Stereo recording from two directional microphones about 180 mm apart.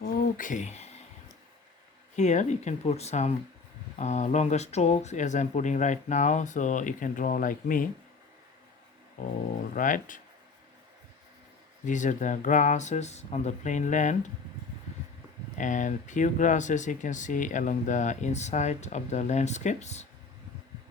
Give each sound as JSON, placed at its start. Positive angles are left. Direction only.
{"t": 0.0, "sound": "a sound", "side_deg": 50}
{"t": 2.1, "sound": "speech", "side_deg": 40}
{"t": 9.2, "sound": "speech", "side_deg": 45}
{"t": 11.9, "sound": "speech", "side_deg": 45}
{"t": 15.5, "sound": "speech", "side_deg": 45}